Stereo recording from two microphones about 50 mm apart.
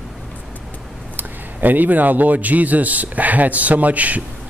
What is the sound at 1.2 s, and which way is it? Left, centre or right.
Speech, right.